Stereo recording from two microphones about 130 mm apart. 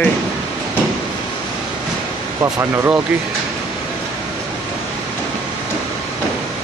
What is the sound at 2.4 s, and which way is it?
Speech, 20° right (ahead or behind).